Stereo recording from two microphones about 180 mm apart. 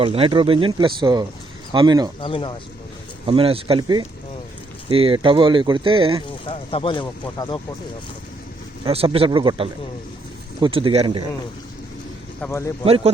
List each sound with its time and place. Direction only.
0.0 s speech: 30° right (ahead or behind)
2.2 s speech: 30° left (ahead or behind)
3.2 s speech: 30° right (ahead or behind)
6.4 s speech: 30° left (ahead or behind)
8.8 s speech: 30° right (ahead or behind)
12.4 s speech: 15° left (ahead or behind)